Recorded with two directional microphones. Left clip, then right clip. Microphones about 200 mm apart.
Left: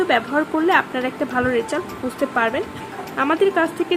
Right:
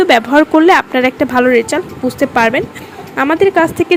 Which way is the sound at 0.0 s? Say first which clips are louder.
Right 10 dB; 40° right (ahead or behind).